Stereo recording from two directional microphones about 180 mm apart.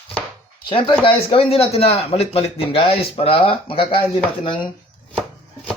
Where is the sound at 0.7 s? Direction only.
30° left (ahead or behind).